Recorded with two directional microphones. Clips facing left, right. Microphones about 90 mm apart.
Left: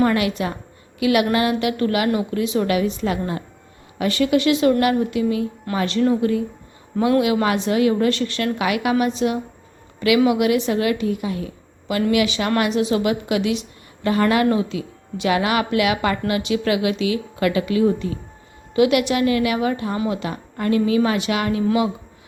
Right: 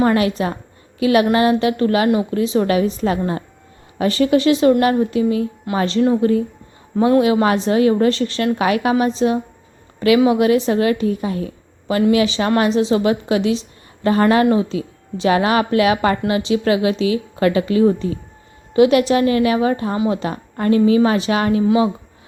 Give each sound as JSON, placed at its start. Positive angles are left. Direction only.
{"t": 0.0, "sound": "a woman's voice", "side_deg": -30}